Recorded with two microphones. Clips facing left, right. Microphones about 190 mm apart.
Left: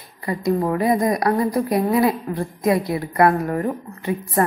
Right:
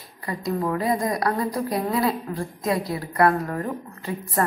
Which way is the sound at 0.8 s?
20° left (ahead or behind).